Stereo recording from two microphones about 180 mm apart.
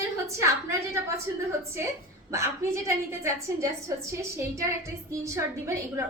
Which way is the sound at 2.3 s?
15° right (ahead or behind).